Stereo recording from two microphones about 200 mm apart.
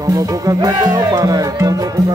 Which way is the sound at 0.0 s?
15° right (ahead or behind).